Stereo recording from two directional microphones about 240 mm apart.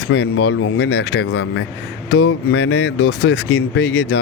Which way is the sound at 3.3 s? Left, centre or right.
Left.